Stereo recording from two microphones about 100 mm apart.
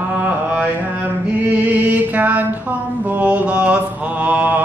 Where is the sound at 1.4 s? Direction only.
15° right (ahead or behind).